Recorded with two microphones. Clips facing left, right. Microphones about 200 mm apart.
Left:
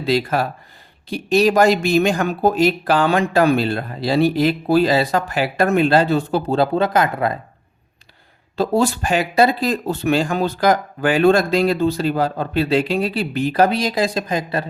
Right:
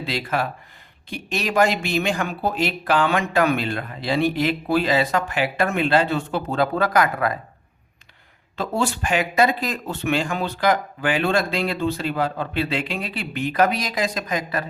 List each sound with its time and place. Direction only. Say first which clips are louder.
0.0 s speech: left 6 dB; 40° left (ahead or behind)
8.5 s speech: left 6 dB; 35° left (ahead or behind)